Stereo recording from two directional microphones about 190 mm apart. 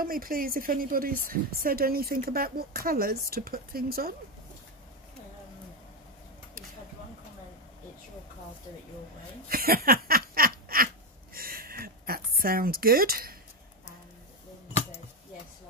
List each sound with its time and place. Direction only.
0.0 s speech: 50° right (ahead or behind)
9.5 s snicker: 50° right (ahead or behind)
11.3 s a sound: 50° right (ahead or behind)